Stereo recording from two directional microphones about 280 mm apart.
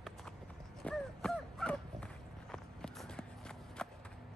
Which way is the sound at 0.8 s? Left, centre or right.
Centre.